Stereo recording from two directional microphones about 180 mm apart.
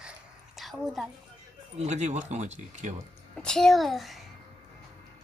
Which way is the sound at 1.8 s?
40° right (ahead or behind).